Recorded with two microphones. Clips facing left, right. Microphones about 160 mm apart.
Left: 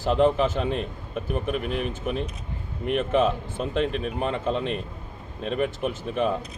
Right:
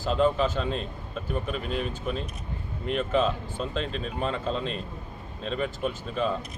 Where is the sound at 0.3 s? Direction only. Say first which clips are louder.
Left 3 dB; 20° left (ahead or behind).